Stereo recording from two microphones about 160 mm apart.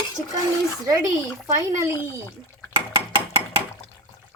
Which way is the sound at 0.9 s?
20° right (ahead or behind).